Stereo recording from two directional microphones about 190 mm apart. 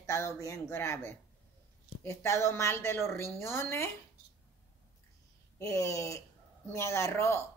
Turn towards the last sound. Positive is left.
turn(degrees=15)  # may be behind; listen again after turning